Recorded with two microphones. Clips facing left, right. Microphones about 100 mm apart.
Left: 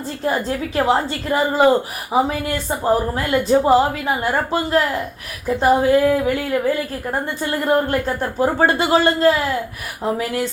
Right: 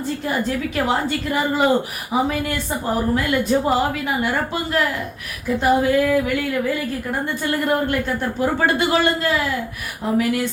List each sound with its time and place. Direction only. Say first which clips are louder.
0.0 s a woman's voice: left 1 dB; 35° left (ahead or behind)